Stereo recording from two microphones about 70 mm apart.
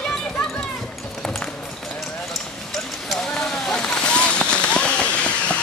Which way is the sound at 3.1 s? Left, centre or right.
Centre.